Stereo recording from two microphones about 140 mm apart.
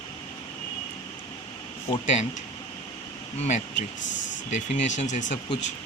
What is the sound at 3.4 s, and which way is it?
Speech, 55° left (ahead or behind).